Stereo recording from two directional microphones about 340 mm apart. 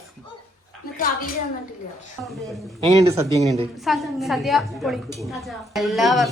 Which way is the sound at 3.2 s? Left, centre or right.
Centre.